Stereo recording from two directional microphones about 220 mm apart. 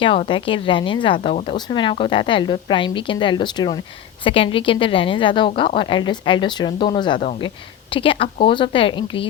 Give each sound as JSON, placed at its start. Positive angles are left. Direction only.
{"t": 0.0, "sound": "speech", "side_deg": 25}